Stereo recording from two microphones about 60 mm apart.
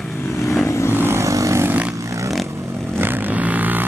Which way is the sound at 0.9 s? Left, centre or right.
Right.